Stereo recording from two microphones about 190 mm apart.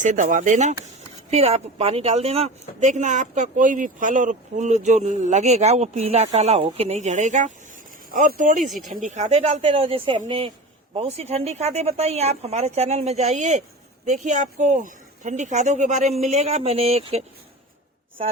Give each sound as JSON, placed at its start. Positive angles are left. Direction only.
{"t": 0.0, "sound": "a woman's voice", "side_deg": -40}
{"t": 8.6, "sound": "speech", "side_deg": 0}
{"t": 8.9, "sound": "a woman's voice", "side_deg": -40}